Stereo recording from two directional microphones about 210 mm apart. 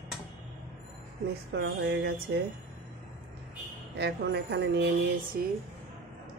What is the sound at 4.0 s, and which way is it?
Speech, 50° right (ahead or behind).